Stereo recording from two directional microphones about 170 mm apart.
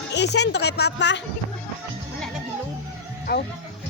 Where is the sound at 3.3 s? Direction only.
75° left (ahead or behind).